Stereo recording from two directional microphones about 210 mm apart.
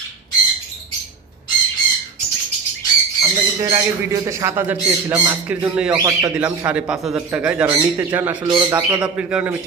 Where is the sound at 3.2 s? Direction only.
15° right (ahead or behind).